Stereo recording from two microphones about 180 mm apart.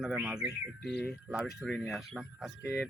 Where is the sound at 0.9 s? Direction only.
70° left (ahead or behind).